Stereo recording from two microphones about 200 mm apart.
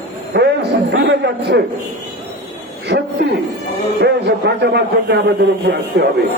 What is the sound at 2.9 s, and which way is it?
A man's voice, 55° right (ahead or behind).